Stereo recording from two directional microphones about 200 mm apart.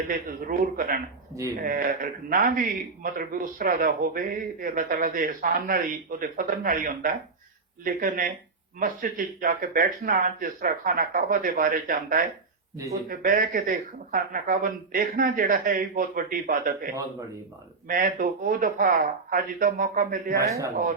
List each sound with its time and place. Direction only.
0.1 s speech: 45° right (ahead or behind)
16.9 s a man's voice: 15° right (ahead or behind)
17.8 s speech: 45° right (ahead or behind)
20.4 s a man's voice: 15° right (ahead or behind)